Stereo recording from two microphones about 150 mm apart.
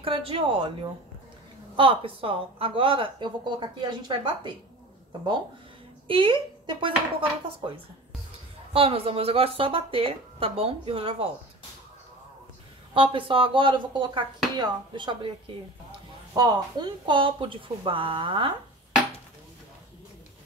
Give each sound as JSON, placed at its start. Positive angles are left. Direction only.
{"t": 0.0, "sound": "a woman's voice", "side_deg": -35}
{"t": 6.0, "sound": "a woman's voice", "side_deg": -35}
{"t": 8.7, "sound": "a woman's voice", "side_deg": -40}
{"t": 12.9, "sound": "a woman's voice", "side_deg": -35}
{"t": 16.3, "sound": "a woman's voice", "side_deg": -30}